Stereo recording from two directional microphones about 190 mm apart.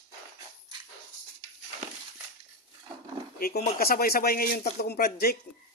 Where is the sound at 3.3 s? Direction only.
50° left (ahead or behind).